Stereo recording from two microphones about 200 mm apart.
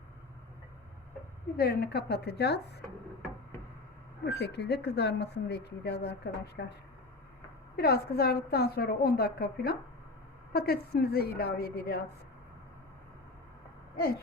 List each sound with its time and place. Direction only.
1.5 s speech: 55° left (ahead or behind)
4.4 s speech: 55° left (ahead or behind)
7.8 s a woman's voice: 50° left (ahead or behind)